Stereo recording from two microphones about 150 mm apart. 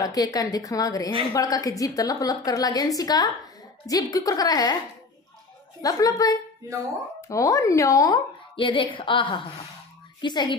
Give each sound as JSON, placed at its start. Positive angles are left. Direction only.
{"t": 0.0, "sound": "a woman's voice", "side_deg": 25}
{"t": 5.8, "sound": "a woman's voice", "side_deg": 25}
{"t": 8.5, "sound": "a woman's voice", "side_deg": 35}